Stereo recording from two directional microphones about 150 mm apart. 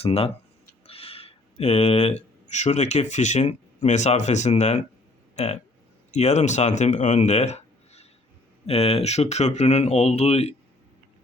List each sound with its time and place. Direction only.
0.0 s speech: 40° left (ahead or behind)